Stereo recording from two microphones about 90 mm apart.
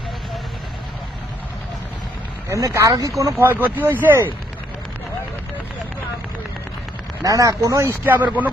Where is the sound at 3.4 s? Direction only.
25° right (ahead or behind).